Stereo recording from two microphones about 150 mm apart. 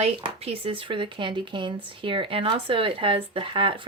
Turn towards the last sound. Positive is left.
turn(degrees=-35)  # may be behind; listen again after turning